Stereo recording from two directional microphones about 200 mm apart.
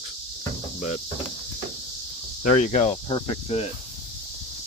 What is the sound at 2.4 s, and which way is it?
Speech, 35° left (ahead or behind).